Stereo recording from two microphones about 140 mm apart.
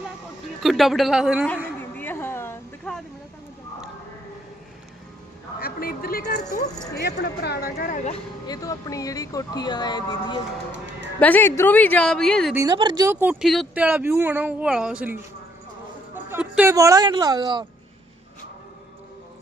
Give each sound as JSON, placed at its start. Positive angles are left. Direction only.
{"t": 0.6, "sound": "speech", "side_deg": 0}
{"t": 2.0, "sound": "a sound", "side_deg": 15}
{"t": 2.9, "sound": "a sound", "side_deg": 5}
{"t": 5.5, "sound": "a sound", "side_deg": 90}
{"t": 7.6, "sound": "speech", "side_deg": 80}
{"t": 8.4, "sound": "speech", "side_deg": 25}
{"t": 11.2, "sound": "a woman's voice", "side_deg": 10}
{"t": 12.5, "sound": "speech", "side_deg": -30}
{"t": 13.1, "sound": "speech", "side_deg": -15}
{"t": 13.4, "sound": "speech", "side_deg": 0}
{"t": 13.7, "sound": "speech", "side_deg": -10}